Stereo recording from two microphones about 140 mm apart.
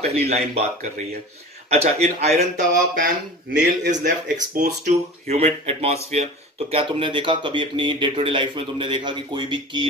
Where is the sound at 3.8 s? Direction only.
60° right (ahead or behind).